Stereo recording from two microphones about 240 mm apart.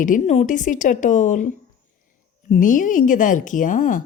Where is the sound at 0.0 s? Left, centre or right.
Left.